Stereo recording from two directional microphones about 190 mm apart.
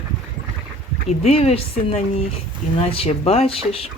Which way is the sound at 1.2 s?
30° left (ahead or behind).